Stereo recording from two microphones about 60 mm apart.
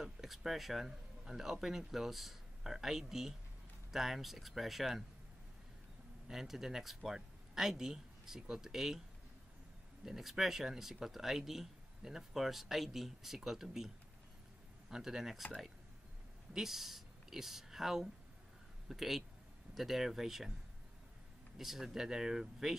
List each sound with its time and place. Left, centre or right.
0.0 s speech: centre
6.2 s speech: centre
10.0 s speech: centre
16.5 s speech: centre
21.5 s speech: centre